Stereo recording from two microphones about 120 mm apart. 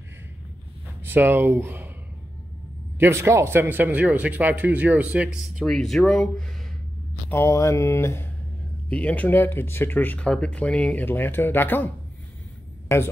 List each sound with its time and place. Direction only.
1.0 s speech: 15° right (ahead or behind)
3.0 s speech: 20° right (ahead or behind)
5.7 s speech: centre (ahead or behind)
7.2 s speech: 20° left (ahead or behind)
11.1 s speech: 20° left (ahead or behind)